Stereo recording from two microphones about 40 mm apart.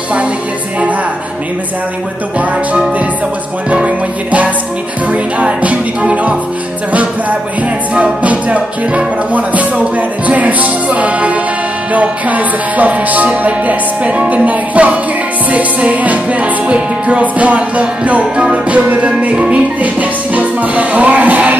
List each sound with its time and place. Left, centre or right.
2.3 s music: right